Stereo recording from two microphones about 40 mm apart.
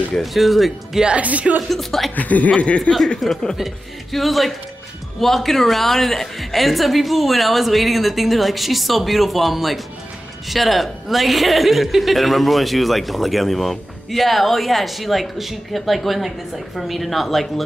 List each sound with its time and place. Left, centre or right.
0.2 s a woman's voice: centre
1.1 s speech: right
1.7 s a woman's voice: centre
2.1 s speech: left
2.5 s speech: left
3.2 s a woman's voice: centre